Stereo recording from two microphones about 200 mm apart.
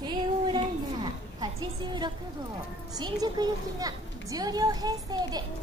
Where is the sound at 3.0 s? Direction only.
20° right (ahead or behind).